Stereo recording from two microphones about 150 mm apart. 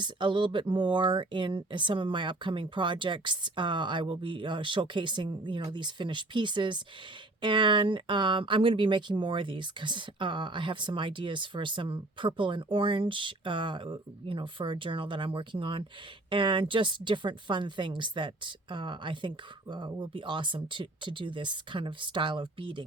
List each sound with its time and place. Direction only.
0.0 s speech: 30° right (ahead or behind)